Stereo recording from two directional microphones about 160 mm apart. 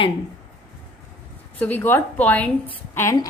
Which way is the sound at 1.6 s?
10° left (ahead or behind).